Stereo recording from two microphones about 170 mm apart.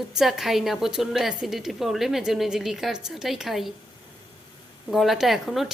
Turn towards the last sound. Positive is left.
turn(degrees=0)  # may be behind; listen again after turning